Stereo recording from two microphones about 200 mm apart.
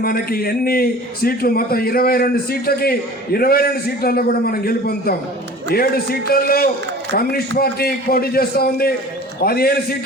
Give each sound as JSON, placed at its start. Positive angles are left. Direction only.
{"t": 0.0, "sound": "a man's voice", "side_deg": 50}